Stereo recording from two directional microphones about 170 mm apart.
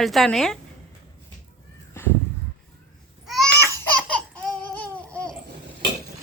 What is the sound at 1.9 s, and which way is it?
Crow, 15° left (ahead or behind).